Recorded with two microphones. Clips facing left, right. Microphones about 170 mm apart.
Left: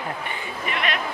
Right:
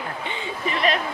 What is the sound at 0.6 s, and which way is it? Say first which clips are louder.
Speech: right 4 dB; 35° right (ahead or behind).